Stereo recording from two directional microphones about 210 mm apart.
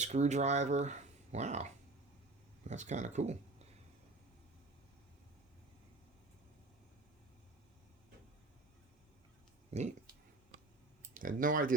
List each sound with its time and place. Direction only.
0.0 s speech: 35° right (ahead or behind)
9.7 s speech: 30° right (ahead or behind)
11.1 s speech: 40° right (ahead or behind)